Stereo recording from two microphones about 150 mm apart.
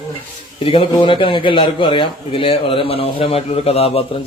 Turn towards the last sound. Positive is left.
turn(degrees=40)  # may be behind; listen again after turning